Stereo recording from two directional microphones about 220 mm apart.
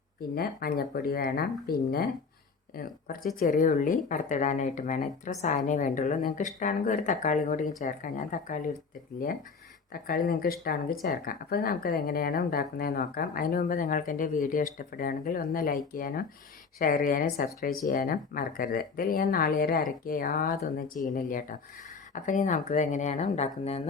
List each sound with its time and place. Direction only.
0.3 s speech: 45° left (ahead or behind)
3.3 s speech: 35° left (ahead or behind)
9.9 s speech: 40° left (ahead or behind)